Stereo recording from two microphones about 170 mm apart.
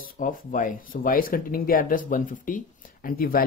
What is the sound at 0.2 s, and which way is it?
Speech, 50° left (ahead or behind).